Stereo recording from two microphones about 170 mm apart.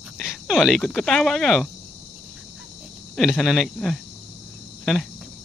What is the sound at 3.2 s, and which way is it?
Speech, centre (ahead or behind).